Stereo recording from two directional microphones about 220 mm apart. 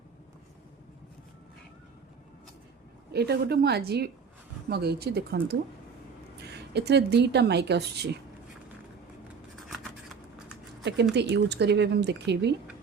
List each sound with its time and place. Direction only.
3.1 s speech: 50° right (ahead or behind)
9.6 s a sound: centre (ahead or behind)
11.1 s speech: 50° right (ahead or behind)